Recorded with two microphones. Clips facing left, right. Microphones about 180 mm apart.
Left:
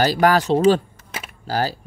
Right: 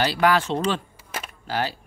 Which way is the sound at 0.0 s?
45° left (ahead or behind).